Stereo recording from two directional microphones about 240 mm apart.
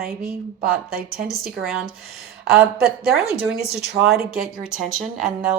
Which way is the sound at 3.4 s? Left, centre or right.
Centre.